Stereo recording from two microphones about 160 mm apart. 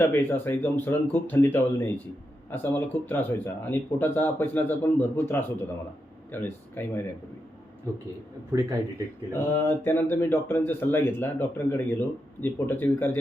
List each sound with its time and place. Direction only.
0.0 s speech: 15° left (ahead or behind)
8.5 s a man's voice: 15° right (ahead or behind)
9.3 s speech: 15° left (ahead or behind)